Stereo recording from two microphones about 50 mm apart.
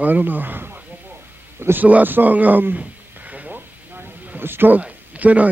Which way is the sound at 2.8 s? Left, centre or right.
Right.